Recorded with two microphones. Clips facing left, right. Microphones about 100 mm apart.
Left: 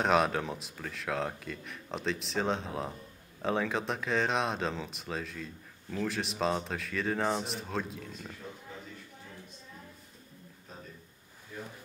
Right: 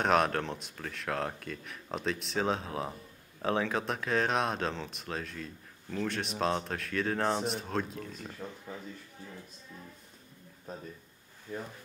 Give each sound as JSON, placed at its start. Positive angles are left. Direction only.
{"t": 0.0, "sound": "speech", "side_deg": 0}
{"t": 10.7, "sound": "a sound", "side_deg": -45}
{"t": 11.5, "sound": "speech", "side_deg": -40}